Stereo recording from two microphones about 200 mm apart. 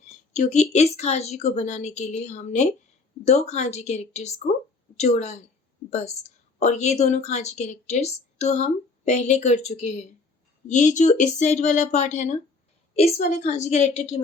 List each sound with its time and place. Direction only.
0.3 s a woman's voice: 35° left (ahead or behind)